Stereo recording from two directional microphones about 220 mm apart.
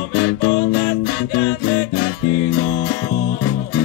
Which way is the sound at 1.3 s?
65° left (ahead or behind).